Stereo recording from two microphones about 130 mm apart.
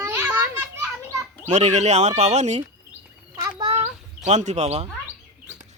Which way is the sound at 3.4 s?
25° right (ahead or behind).